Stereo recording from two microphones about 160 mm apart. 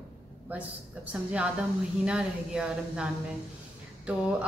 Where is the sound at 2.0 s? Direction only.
5° right (ahead or behind).